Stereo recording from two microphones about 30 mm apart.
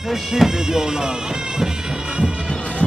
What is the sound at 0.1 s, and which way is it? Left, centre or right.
Speech, centre.